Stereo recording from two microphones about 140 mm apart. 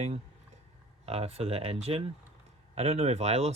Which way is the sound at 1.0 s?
45° right (ahead or behind).